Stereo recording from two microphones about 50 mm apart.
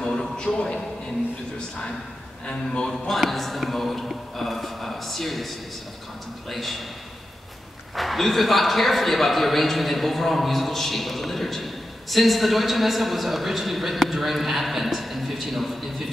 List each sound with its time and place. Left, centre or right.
0.0 s a sound: centre
2.4 s speech: centre
2.9 s a man's voice: centre
6.5 s a man's voice: centre
7.9 s a man's voice: centre